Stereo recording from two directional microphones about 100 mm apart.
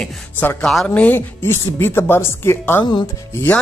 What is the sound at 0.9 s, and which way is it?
Speech, 20° left (ahead or behind).